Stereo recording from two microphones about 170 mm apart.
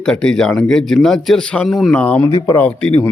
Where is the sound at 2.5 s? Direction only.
10° left (ahead or behind).